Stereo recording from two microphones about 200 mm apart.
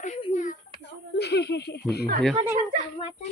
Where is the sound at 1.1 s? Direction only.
55° left (ahead or behind).